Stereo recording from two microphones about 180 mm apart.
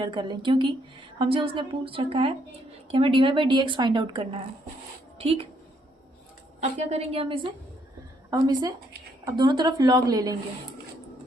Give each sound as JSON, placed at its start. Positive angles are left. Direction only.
{"t": 0.0, "sound": "a woman's voice", "side_deg": -25}
{"t": 6.6, "sound": "a woman's voice", "side_deg": -35}
{"t": 8.3, "sound": "a woman's voice", "side_deg": -20}